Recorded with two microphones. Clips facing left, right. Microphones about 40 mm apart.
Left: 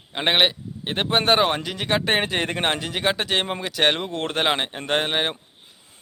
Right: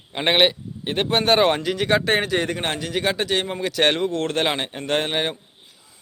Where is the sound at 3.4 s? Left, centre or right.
Left.